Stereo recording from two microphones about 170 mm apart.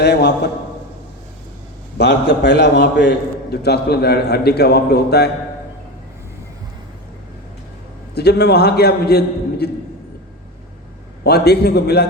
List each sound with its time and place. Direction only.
0.0 s a man's voice: 85° left
2.0 s a man's voice: 90° left; by 5.3 s 70° left (ahead or behind)
8.1 s a man's voice: 75° left (ahead or behind)
11.2 s a man's voice: 70° left (ahead or behind)